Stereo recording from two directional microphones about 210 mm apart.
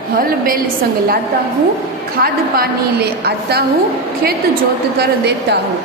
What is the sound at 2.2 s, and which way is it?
A woman's voice, 50° right (ahead or behind).